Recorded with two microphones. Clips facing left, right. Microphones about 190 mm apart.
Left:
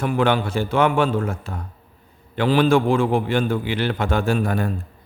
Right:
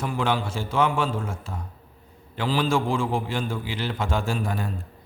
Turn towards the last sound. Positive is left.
turn(degrees=60)  # may be behind; listen again after turning